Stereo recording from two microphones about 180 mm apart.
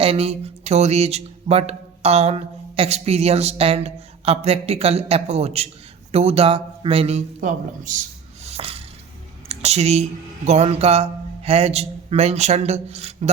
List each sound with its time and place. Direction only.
0.0 s speech: 35° right (ahead or behind)
8.4 s music: 35° right (ahead or behind)
9.5 s speech: 35° right (ahead or behind)